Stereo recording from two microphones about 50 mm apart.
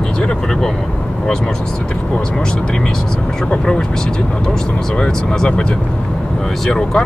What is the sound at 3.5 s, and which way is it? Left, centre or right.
Speech, centre.